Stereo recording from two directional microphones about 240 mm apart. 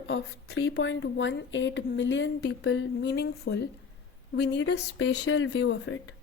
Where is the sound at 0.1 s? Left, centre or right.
Left.